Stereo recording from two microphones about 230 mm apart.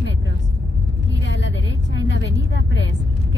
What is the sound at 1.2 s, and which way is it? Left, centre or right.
Vehicle, left.